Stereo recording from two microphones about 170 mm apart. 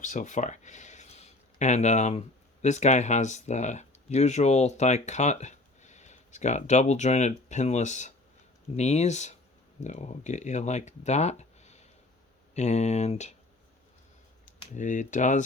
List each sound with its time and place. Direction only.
0.0 s speech: 45° left (ahead or behind)
14.4 s speech: 45° left (ahead or behind)